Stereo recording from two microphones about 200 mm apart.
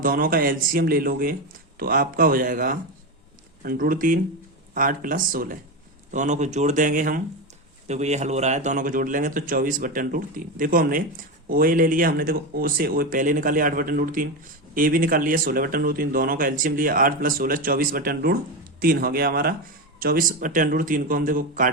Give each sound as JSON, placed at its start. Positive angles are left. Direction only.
{"t": 0.0, "sound": "a man's voice", "side_deg": -45}